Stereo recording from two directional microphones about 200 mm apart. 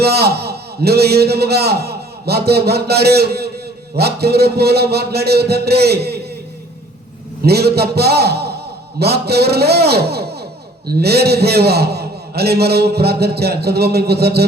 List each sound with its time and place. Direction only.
0.0 s a man's voice: 55° right (ahead or behind)
7.4 s a man's voice: 55° right (ahead or behind)